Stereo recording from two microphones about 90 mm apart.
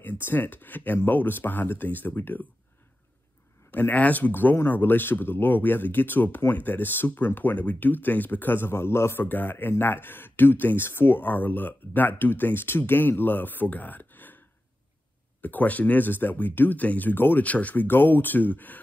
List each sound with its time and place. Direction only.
0.0 s speech: 25° left (ahead or behind)
3.7 s speech: 20° left (ahead or behind)
15.4 s speech: 20° left (ahead or behind)